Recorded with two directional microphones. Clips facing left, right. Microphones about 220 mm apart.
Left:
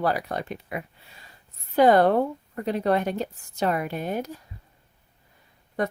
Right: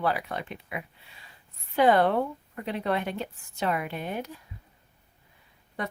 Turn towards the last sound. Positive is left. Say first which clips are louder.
# left 7 dB
turn(degrees=45)  # may be behind; listen again after turning